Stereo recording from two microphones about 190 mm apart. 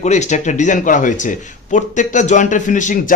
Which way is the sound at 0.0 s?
40° left (ahead or behind).